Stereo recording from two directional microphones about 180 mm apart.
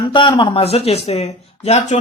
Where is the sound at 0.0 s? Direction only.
25° left (ahead or behind).